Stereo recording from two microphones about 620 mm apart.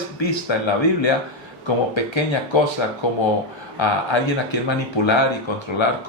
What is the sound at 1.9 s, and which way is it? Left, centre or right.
Speech, left.